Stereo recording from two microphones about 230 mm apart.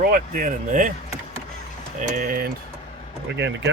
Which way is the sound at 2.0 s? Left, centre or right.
Right.